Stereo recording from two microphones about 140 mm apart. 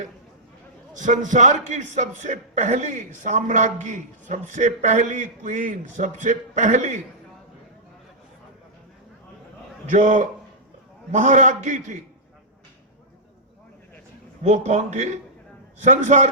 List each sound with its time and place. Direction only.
0.9 s a man's voice: 65° right (ahead or behind)
9.9 s a man's voice: 60° right (ahead or behind)
14.4 s a man's voice: 55° right (ahead or behind)